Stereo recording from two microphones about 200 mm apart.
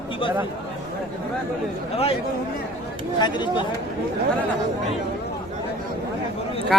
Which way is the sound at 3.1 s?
20° left (ahead or behind).